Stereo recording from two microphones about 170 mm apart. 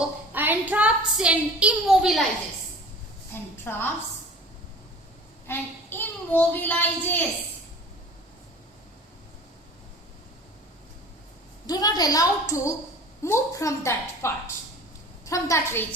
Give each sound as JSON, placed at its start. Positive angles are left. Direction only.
{"t": 0.3, "sound": "a woman's voice", "side_deg": -10}
{"t": 3.3, "sound": "a woman's voice", "side_deg": 15}
{"t": 5.5, "sound": "a child's voice", "side_deg": 10}
{"t": 11.6, "sound": "a woman's voice", "side_deg": 25}